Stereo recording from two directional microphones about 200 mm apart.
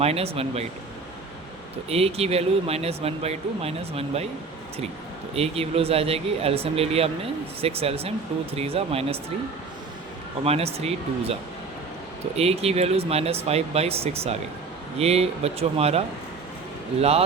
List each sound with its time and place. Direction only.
0.0 s speech: 30° right (ahead or behind)
1.9 s speech: 30° right (ahead or behind)
5.3 s speech: 30° right (ahead or behind)
10.4 s speech: 30° right (ahead or behind)
12.4 s speech: 30° right (ahead or behind)